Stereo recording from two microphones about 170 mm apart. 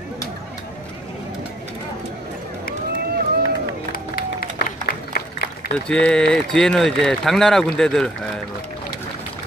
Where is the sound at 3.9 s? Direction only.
60° left (ahead or behind).